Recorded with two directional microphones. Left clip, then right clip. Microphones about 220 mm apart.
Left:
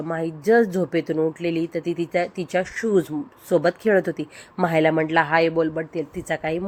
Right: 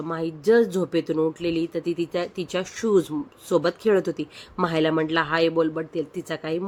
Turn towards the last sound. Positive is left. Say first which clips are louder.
# left 3 dB
turn(degrees=-5)  # may be behind; listen again after turning